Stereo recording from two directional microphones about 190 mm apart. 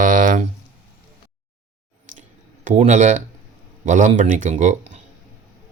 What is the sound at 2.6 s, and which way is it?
Speech, 40° right (ahead or behind).